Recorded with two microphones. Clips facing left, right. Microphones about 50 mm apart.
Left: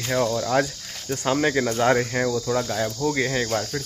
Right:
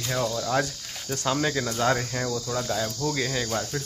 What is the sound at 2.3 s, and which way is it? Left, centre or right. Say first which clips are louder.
Cricket: left 4 dB; centre.